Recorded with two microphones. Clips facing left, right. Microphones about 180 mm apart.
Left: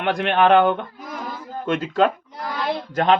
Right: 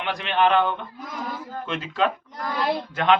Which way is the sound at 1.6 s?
45° left (ahead or behind).